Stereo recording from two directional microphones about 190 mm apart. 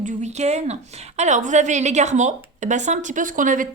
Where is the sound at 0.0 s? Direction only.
35° right (ahead or behind).